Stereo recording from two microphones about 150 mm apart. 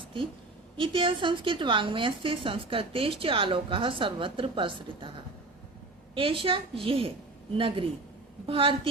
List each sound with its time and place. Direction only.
0.0 s a sound: 35° right (ahead or behind)
0.8 s a woman's voice: 35° right (ahead or behind)
6.1 s a woman's voice: 35° right (ahead or behind)